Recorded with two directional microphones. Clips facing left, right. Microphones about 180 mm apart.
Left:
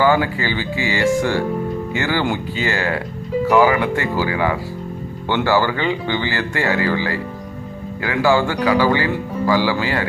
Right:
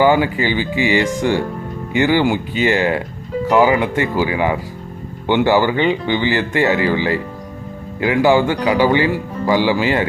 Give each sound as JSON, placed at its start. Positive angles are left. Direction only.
{"t": 0.0, "sound": "speech", "side_deg": -15}